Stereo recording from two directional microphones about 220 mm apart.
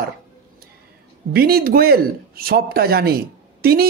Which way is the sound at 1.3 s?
45° right (ahead or behind).